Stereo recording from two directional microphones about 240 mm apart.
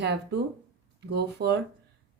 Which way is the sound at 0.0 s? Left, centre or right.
Right.